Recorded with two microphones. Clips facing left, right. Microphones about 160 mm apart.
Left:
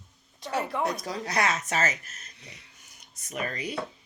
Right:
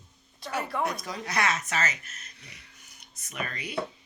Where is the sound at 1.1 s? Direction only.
30° left (ahead or behind).